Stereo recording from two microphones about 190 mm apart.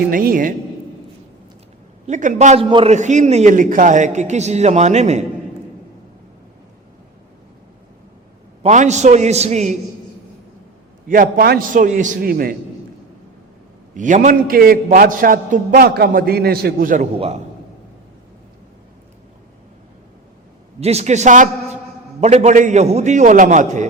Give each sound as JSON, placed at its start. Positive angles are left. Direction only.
{"t": 0.1, "sound": "a man's voice", "side_deg": -50}
{"t": 2.0, "sound": "a man's voice", "side_deg": -40}
{"t": 2.6, "sound": "a man's voice", "side_deg": -25}
{"t": 2.9, "sound": "a man's voice", "side_deg": -40}
{"t": 8.6, "sound": "a man's voice", "side_deg": -40}
{"t": 11.1, "sound": "a man's voice", "side_deg": -50}
{"t": 13.9, "sound": "a man's voice", "side_deg": -40}
{"t": 20.8, "sound": "a man's voice", "side_deg": -35}